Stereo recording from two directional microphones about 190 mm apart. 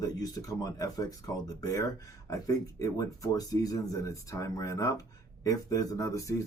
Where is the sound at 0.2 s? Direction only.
20° left (ahead or behind).